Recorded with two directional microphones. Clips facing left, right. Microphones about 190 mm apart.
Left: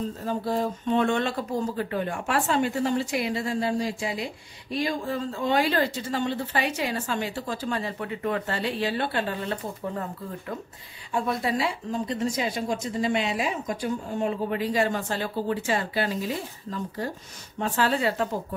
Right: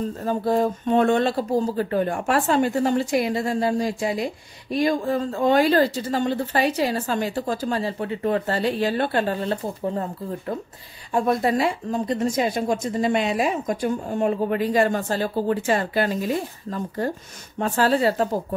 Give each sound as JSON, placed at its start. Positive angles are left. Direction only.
{"t": 0.2, "sound": "speech", "side_deg": -50}
{"t": 11.1, "sound": "speech", "side_deg": -45}